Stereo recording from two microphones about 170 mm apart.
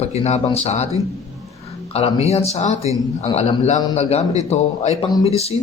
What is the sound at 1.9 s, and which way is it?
Speech, 35° left (ahead or behind).